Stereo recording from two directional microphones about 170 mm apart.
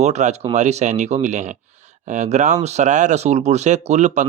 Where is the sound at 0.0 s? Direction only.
40° right (ahead or behind).